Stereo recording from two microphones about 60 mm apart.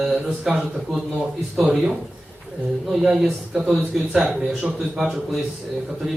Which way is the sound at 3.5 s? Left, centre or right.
Centre.